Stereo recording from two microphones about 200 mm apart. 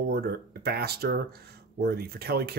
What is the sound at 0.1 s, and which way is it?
Speech, 50° right (ahead or behind).